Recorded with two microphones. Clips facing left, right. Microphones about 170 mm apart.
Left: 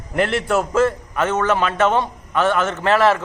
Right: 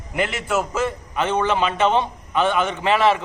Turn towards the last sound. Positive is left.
turn(degrees=-15)  # may be behind; listen again after turning